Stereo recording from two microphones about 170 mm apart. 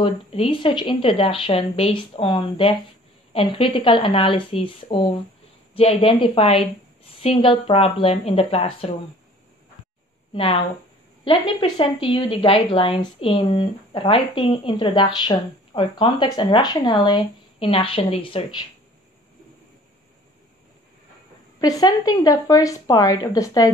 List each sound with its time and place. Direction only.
0.0 s a woman's voice: 35° left (ahead or behind)
10.3 s a woman's voice: 35° left (ahead or behind)
21.5 s a woman's voice: 20° left (ahead or behind)